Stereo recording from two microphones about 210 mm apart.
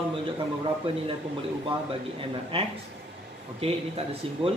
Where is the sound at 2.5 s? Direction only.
25° right (ahead or behind).